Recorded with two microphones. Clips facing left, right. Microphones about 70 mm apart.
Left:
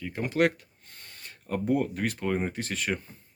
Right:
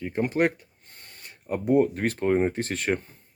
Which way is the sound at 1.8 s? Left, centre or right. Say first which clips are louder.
Right 7 dB; right.